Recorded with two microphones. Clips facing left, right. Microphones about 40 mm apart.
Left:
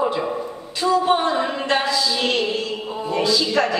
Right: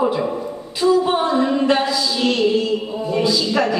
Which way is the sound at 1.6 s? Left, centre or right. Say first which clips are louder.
Right 3 dB; centre.